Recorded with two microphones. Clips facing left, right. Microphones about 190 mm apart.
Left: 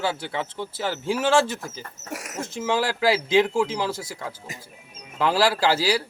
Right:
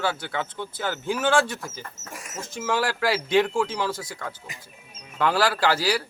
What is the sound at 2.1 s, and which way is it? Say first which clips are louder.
Dog: left 6 dB; 70° left (ahead or behind).